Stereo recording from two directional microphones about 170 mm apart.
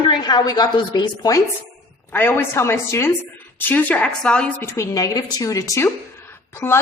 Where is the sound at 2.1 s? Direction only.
15° left (ahead or behind).